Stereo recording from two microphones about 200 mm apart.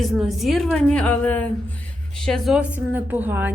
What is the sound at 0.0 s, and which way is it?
A woman's voice, centre (ahead or behind).